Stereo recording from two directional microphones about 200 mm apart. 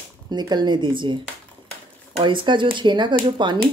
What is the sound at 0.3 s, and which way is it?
Speech, 20° right (ahead or behind).